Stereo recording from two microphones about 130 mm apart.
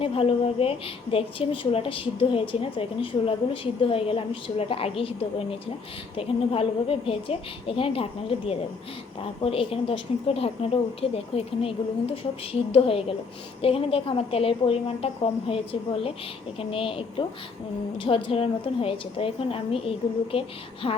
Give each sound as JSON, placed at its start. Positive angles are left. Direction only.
{"t": 0.0, "sound": "a woman's voice", "side_deg": 45}